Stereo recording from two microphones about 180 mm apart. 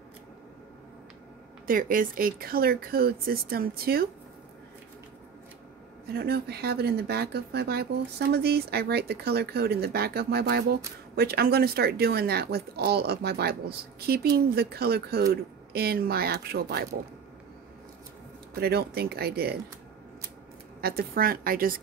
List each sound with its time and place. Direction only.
1.7 s speech: 50° right (ahead or behind)
6.1 s speech: 60° right (ahead or behind)
18.6 s speech: 60° right (ahead or behind)
20.8 s speech: 55° right (ahead or behind)